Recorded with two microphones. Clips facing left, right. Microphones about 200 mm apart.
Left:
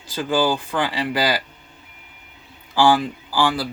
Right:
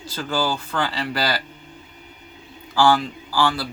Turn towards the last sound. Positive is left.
turn(degrees=15)  # may be behind; listen again after turning